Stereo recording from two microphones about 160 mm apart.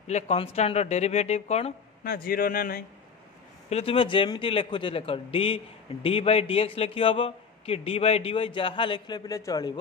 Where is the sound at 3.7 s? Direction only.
35° left (ahead or behind).